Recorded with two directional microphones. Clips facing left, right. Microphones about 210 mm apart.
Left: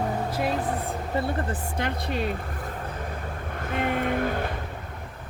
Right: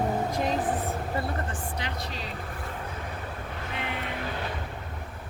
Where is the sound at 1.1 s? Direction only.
25° left (ahead or behind).